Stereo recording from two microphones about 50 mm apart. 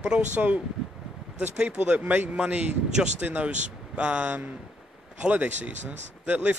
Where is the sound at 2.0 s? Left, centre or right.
Right.